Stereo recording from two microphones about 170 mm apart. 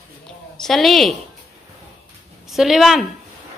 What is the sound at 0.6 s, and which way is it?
Speech, centre (ahead or behind).